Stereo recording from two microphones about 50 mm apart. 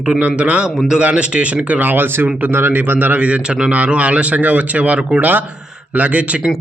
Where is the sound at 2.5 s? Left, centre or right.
Right; by 3.7 s centre.